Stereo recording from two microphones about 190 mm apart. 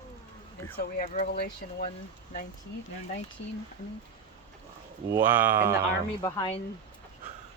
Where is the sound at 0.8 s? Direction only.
45° left (ahead or behind).